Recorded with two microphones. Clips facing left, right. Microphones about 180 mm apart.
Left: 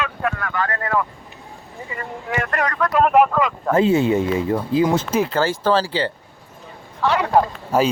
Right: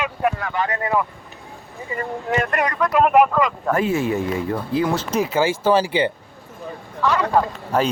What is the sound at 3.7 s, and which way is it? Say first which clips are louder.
Speech: left 7 dB; 25° left (ahead or behind).